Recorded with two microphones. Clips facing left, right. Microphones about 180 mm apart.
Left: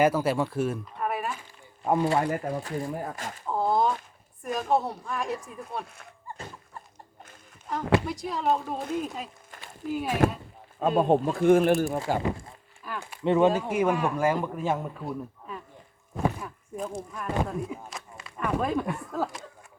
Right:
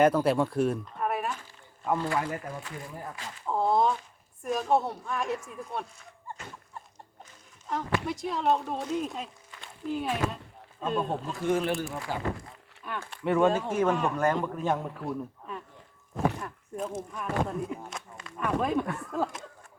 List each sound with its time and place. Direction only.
0.0 s speech: 5° left (ahead or behind)
1.9 s speech: 20° left (ahead or behind)
2.4 s speech: 35° left (ahead or behind)
2.9 s speech: 50° left (ahead or behind)
3.4 s a sound: centre (ahead or behind)
4.4 s speech: centre (ahead or behind)
7.7 s speech: centre (ahead or behind)
10.8 s speech: 55° left (ahead or behind)
12.2 s speech: 25° left (ahead or behind)
12.8 s speech: centre (ahead or behind)
13.2 s a man's voice: 20° left (ahead or behind); by 15.6 s 5° left (ahead or behind)
16.1 s a sound: centre (ahead or behind)
17.3 s speech: centre (ahead or behind)